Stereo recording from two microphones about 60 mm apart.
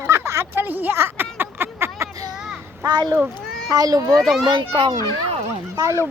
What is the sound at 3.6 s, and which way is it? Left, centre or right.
Speech, right.